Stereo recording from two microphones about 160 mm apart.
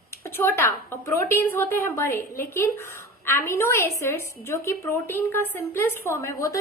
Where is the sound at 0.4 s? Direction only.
15° left (ahead or behind).